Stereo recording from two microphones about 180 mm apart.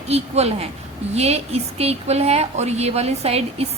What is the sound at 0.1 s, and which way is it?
A woman's voice, 35° right (ahead or behind).